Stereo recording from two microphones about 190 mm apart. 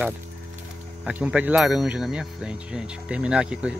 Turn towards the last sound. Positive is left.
turn(degrees=-5)  # may be behind; listen again after turning